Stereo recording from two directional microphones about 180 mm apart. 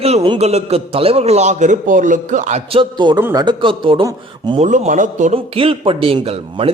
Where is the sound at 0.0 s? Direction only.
35° right (ahead or behind).